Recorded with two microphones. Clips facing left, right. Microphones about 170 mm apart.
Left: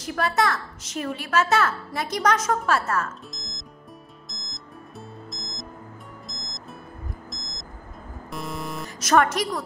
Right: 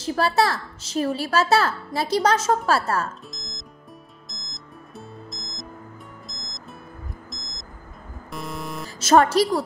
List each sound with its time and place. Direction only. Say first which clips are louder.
0.0 s a woman's voice: right 3 dB; 30° right (ahead or behind)
3.3 s music: even; centre (ahead or behind)
7.2 s vehicle: left 1 dB; centre (ahead or behind)
8.3 s music: even; centre (ahead or behind)
8.8 s a woman's voice: right 3 dB; 30° right (ahead or behind)